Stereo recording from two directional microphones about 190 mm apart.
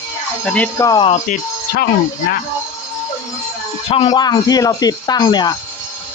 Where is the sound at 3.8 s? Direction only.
30° left (ahead or behind).